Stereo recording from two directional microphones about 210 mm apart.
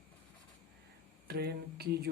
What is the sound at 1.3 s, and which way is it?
Speech, 50° right (ahead or behind).